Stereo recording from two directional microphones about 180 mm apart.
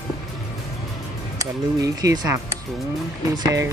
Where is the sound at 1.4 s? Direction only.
20° right (ahead or behind).